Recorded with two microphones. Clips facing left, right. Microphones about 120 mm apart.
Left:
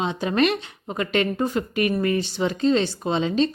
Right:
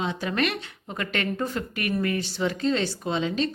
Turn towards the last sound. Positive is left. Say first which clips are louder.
# left 5 dB
turn(degrees=25)  # may be behind; listen again after turning